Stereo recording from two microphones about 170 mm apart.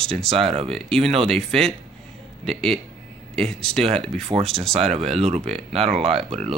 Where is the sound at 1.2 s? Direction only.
5° left (ahead or behind).